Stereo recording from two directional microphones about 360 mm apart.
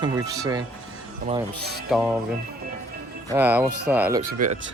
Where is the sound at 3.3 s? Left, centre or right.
Centre.